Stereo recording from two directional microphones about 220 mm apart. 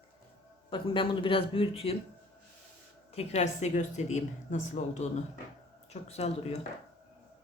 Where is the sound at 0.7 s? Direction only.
20° left (ahead or behind).